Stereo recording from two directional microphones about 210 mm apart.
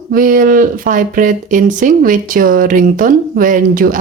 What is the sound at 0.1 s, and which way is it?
Speech, 40° right (ahead or behind).